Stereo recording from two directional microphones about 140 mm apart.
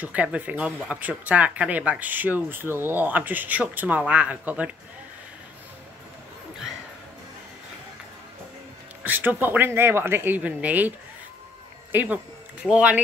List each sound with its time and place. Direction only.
0.0 s speech: 10° right (ahead or behind)
9.0 s speech: 15° right (ahead or behind)
11.9 s speech: 10° right (ahead or behind)